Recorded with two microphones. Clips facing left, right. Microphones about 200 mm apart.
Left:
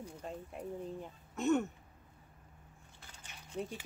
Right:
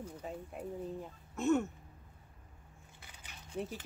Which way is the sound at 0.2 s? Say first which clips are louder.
Left 1 dB; 5° right (ahead or behind).